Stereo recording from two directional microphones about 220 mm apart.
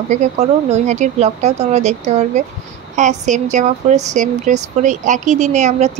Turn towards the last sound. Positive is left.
turn(degrees=-30)  # may be behind; listen again after turning